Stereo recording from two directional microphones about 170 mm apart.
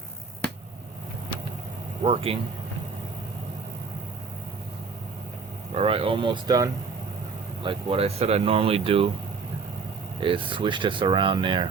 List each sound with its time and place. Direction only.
2.0 s speech: 35° right (ahead or behind)
5.7 s speech: 35° right (ahead or behind)
10.2 s speech: 30° right (ahead or behind)